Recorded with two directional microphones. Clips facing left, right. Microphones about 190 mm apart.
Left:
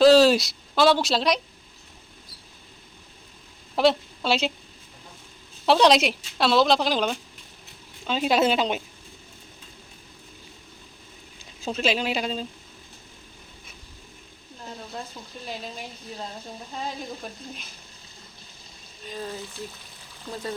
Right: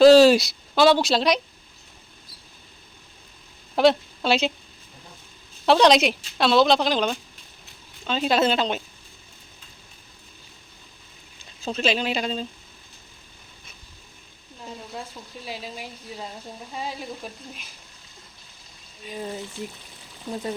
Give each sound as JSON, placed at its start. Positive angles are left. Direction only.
{"t": 0.0, "sound": "speech", "side_deg": 0}
{"t": 3.8, "sound": "speech", "side_deg": 0}
{"t": 5.6, "sound": "a woman's voice", "side_deg": 0}
{"t": 11.6, "sound": "speech", "side_deg": 5}
{"t": 15.4, "sound": "a woman's voice", "side_deg": -5}
{"t": 19.0, "sound": "speech", "side_deg": -15}